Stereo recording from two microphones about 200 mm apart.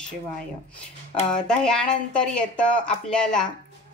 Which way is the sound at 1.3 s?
5° left (ahead or behind).